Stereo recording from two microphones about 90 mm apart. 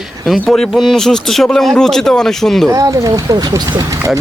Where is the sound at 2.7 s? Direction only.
40° right (ahead or behind).